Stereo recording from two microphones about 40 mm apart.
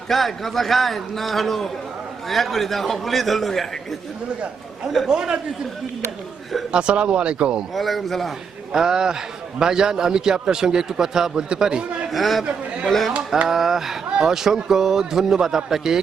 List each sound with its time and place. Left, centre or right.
0.1 s a man's voice: centre
5.0 s speech: centre
6.7 s speech: right
7.8 s a man's voice: centre
8.7 s speech: centre
12.1 s a man's voice: centre
13.5 s speech: centre